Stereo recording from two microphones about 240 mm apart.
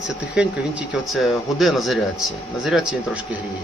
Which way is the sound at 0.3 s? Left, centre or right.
Centre.